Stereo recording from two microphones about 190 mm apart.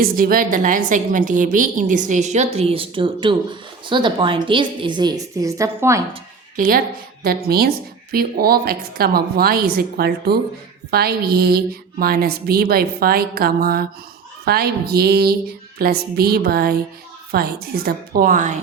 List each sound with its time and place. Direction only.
0.0 s a woman's voice: 50° right (ahead or behind); by 6.0 s 15° right (ahead or behind)
6.6 s a woman's voice: 50° right (ahead or behind)
14.4 s a sound: 55° right (ahead or behind)
17.3 s a woman's voice: 55° right (ahead or behind)